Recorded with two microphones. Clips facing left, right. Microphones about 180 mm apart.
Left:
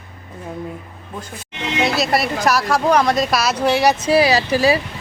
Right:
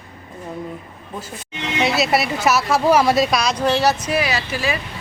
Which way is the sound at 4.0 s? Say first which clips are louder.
Left 7 dB; 30° left (ahead or behind).